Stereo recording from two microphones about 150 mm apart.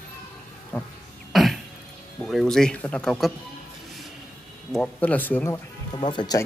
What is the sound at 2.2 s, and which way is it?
Speech, centre (ahead or behind).